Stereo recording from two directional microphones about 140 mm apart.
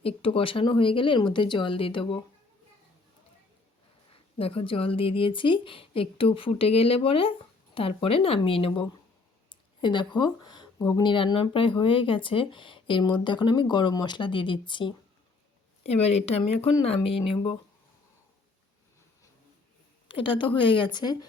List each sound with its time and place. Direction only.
0.0 s speech: 40° left (ahead or behind)
4.1 s speech: 40° left (ahead or behind)
15.8 s speech: 50° left (ahead or behind)
20.1 s speech: 35° left (ahead or behind)